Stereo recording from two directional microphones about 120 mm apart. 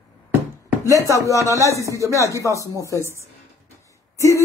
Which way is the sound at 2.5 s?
25° left (ahead or behind).